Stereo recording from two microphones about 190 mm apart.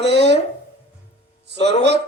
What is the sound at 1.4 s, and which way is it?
Speech, 65° right (ahead or behind).